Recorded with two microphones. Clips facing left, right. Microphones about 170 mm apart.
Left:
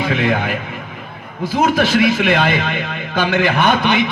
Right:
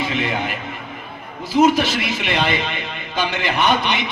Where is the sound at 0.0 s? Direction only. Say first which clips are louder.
Left 5 dB; 55° left (ahead or behind).